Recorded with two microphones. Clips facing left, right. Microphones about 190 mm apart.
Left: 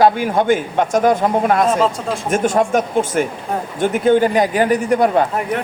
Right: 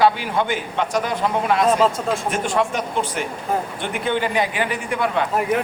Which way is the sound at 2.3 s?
45° left (ahead or behind).